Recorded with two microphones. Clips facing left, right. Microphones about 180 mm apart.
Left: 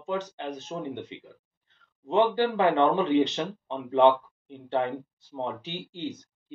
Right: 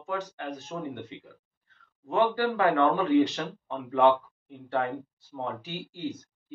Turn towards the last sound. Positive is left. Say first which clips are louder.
# even
turn(degrees=20)  # may be behind; listen again after turning